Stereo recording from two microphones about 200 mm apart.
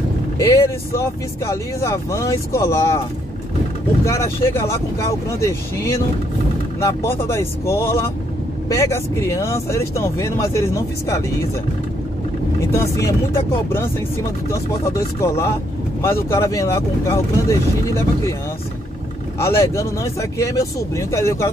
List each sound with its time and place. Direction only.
0.4 s speech: 15° left (ahead or behind)
4.0 s speech: 15° left (ahead or behind)
12.7 s speech: 15° left (ahead or behind)
15.1 s speech: 15° left (ahead or behind)
19.3 s speech: 15° left (ahead or behind)